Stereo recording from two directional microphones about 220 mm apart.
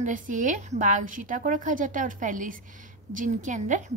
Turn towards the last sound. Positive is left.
turn(degrees=-35)  # may be behind; listen again after turning